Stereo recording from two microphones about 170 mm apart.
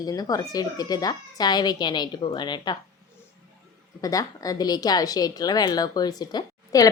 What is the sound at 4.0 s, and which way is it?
Speech, 20° left (ahead or behind).